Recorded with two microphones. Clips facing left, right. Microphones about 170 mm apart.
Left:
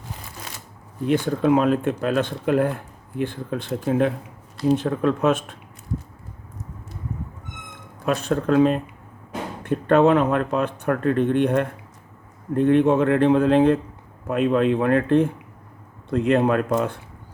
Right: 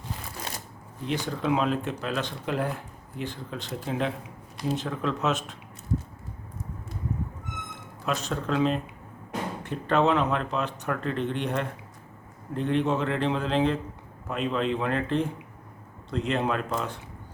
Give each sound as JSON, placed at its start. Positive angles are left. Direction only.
{"t": 1.0, "sound": "speech", "side_deg": 50}
{"t": 8.0, "sound": "speech", "side_deg": 55}